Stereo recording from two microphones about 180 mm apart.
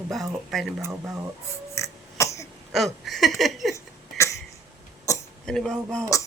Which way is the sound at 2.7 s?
Centre (ahead or behind).